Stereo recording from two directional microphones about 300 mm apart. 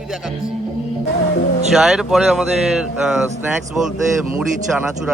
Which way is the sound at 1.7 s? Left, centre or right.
Centre.